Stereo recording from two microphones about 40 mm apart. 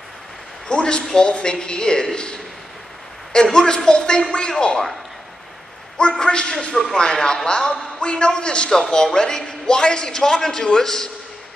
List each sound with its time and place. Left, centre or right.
0.7 s a man's voice: left
3.5 s a man's voice: centre
5.9 s a man's voice: left
6.7 s speech: centre
7.4 s a man's voice: left